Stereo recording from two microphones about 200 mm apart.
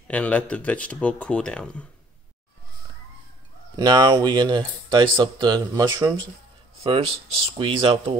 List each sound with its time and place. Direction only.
0.1 s speech: 5° left (ahead or behind)
3.7 s speech: 20° right (ahead or behind)